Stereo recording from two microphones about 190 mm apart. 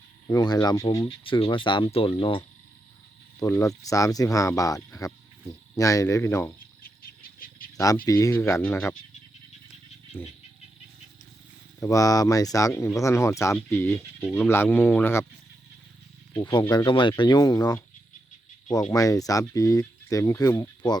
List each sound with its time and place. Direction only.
0.3 s speech: 20° left (ahead or behind)
3.4 s speech: 15° left (ahead or behind)
6.8 s bird: 50° left (ahead or behind)
8.0 s speech: 15° left (ahead or behind)
10.1 s speech: 10° left (ahead or behind)
11.8 s speech: 15° left (ahead or behind)
16.3 s speech: 20° left (ahead or behind)
18.9 s speech: 20° left (ahead or behind)